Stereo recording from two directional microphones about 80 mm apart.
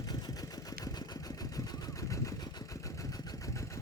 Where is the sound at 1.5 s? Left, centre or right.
Left.